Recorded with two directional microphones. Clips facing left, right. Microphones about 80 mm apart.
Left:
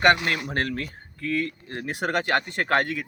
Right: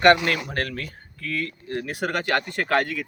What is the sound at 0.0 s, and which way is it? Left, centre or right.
Speech, centre.